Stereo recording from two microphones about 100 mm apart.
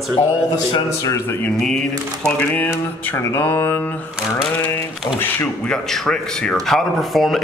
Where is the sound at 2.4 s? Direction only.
20° left (ahead or behind).